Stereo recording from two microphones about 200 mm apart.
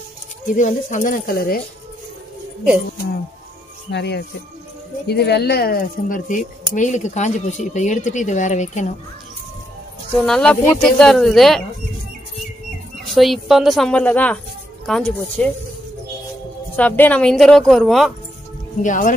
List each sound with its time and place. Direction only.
0.5 s speech: 40° left (ahead or behind)
3.9 s a woman's voice: 55° left (ahead or behind); by 8.9 s 35° left (ahead or behind)
10.2 s a woman's voice: 5° left (ahead or behind)
13.0 s a woman's voice: centre (ahead or behind)
16.7 s a woman's voice: 10° left (ahead or behind)
18.8 s a woman's voice: 40° left (ahead or behind)